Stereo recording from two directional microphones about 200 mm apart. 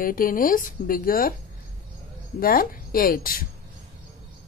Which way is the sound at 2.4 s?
45° left (ahead or behind).